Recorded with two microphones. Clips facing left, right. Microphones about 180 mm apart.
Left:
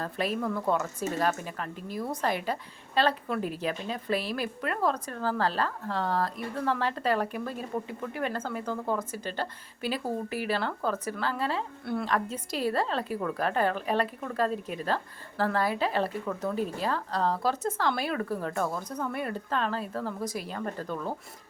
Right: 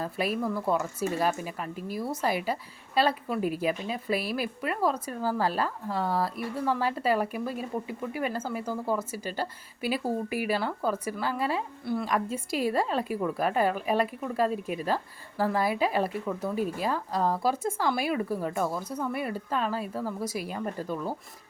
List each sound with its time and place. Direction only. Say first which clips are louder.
0.0 s speech: right 1 dB; 10° right (ahead or behind)